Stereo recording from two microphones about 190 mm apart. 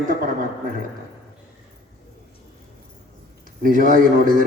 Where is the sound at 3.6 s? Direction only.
45° right (ahead or behind).